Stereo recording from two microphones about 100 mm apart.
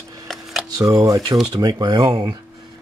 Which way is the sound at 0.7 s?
35° right (ahead or behind).